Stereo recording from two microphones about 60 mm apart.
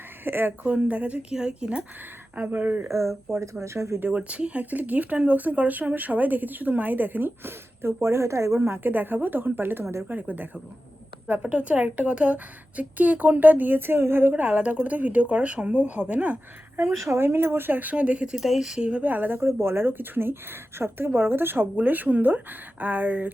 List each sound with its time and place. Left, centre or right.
0.3 s speech: right; by 1.8 s centre
2.3 s speech: right
2.8 s speech: right
4.0 s speech: right
8.0 s speech: right
8.8 s speech: right
10.1 s speech: right
14.4 s speech: right
16.8 s speech: right
18.3 s speech: centre
19.0 s speech: right
19.4 s speech: right